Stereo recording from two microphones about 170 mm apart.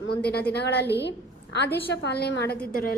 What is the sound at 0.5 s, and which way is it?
A woman's voice, 80° left.